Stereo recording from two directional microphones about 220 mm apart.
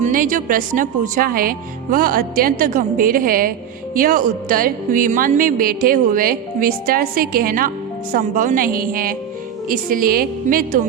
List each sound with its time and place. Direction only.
0.0 s speech: 35° right (ahead or behind)